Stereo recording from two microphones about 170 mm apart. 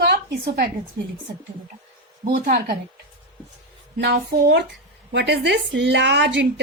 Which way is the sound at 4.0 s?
80° right.